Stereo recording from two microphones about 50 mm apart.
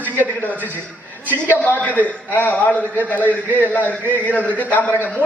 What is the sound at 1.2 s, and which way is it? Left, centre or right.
Speech, right.